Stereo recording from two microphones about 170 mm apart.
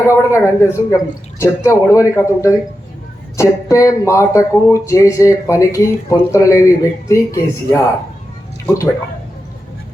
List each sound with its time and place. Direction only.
0.1 s speech: 15° left (ahead or behind)